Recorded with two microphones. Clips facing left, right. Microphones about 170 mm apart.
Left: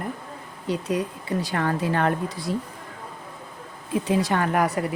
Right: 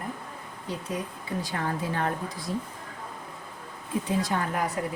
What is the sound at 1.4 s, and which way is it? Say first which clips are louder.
Speech: left 6 dB; 80° left.